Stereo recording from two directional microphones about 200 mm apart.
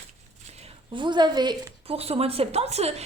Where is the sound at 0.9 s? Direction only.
25° right (ahead or behind).